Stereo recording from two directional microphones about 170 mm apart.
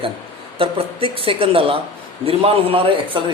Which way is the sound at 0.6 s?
30° right (ahead or behind).